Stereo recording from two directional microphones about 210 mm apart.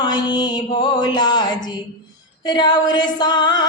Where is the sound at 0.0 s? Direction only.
20° left (ahead or behind).